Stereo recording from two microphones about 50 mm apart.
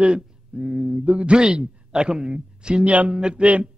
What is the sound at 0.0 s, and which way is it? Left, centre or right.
Speech, right.